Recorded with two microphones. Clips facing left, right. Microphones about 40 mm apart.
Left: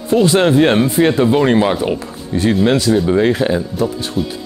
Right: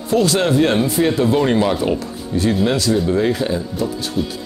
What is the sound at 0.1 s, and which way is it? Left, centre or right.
Speech, left.